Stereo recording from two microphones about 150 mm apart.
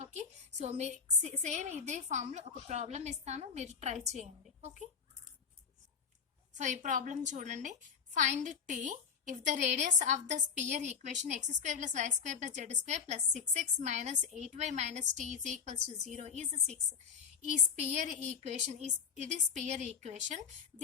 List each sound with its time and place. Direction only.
0.0 s a woman's voice: 50° right (ahead or behind)
6.6 s a woman's voice: 55° right (ahead or behind)